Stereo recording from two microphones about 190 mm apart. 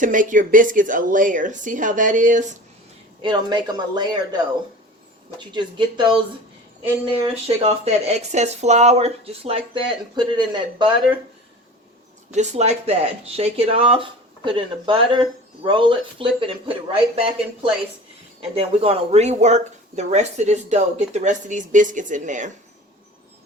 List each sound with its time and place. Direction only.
0.0 s a woman's voice: 45° right (ahead or behind)
3.2 s speech: 25° right (ahead or behind)
5.4 s speech: 25° right (ahead or behind)
7.4 s speech: 35° right (ahead or behind)
12.3 s speech: 35° right (ahead or behind)